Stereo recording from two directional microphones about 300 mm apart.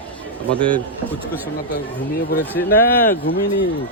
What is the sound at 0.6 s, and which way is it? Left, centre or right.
Speech, centre.